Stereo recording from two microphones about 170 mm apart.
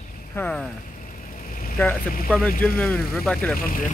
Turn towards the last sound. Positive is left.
turn(degrees=55)  # may be behind; listen again after turning